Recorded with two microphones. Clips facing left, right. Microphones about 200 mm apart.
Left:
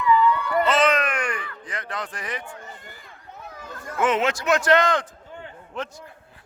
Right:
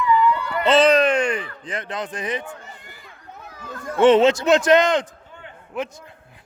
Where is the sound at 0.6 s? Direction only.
30° right (ahead or behind).